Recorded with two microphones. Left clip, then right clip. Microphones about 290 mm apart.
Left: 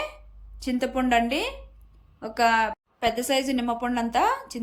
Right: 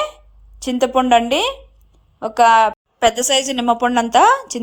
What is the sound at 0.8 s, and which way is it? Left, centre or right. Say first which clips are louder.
Speech: right 10 dB; right.